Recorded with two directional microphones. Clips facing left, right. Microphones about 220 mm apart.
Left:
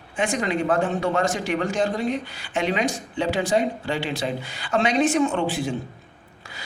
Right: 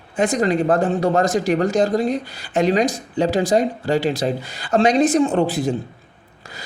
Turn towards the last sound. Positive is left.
turn(degrees=-40)  # may be behind; listen again after turning